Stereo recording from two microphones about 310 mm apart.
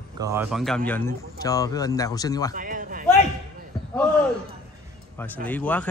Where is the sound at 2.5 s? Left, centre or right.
Right.